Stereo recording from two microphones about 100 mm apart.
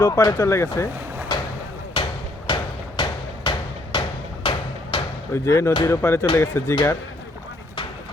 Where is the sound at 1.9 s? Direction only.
50° left (ahead or behind).